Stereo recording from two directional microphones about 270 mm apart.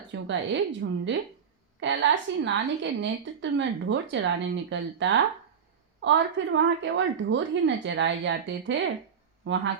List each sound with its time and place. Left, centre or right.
0.1 s a woman's voice: right